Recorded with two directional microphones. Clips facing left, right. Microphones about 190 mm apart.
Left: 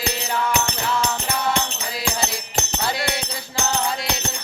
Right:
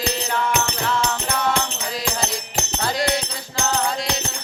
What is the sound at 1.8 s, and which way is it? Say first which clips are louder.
Music: right 1 dB; 5° left (ahead or behind).